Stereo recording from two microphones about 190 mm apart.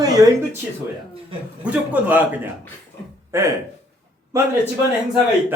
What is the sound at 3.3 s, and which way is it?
Speech, 15° right (ahead or behind).